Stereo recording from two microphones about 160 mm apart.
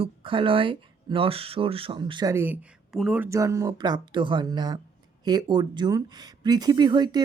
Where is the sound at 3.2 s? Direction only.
20° right (ahead or behind).